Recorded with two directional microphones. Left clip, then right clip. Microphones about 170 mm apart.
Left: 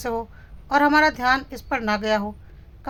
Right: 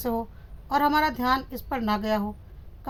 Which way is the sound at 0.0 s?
15° left (ahead or behind).